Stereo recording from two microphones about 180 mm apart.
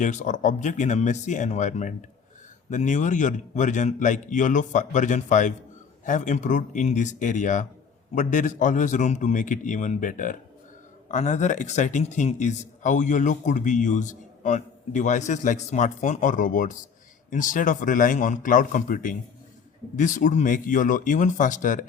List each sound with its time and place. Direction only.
0.0 s speech: 45° left (ahead or behind)